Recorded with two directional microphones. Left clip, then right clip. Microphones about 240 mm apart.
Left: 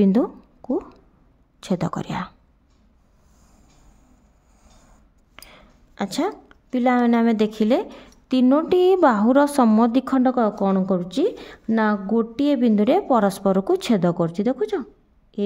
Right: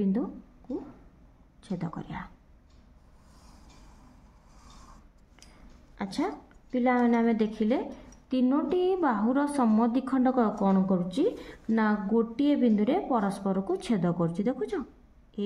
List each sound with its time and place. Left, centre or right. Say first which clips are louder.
0.0 s a sound: left 11 dB; left
1.6 s speech: left 12 dB; left
5.3 s speech: left 11 dB; left